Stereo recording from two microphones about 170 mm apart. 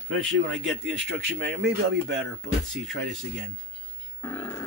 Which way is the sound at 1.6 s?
90° right.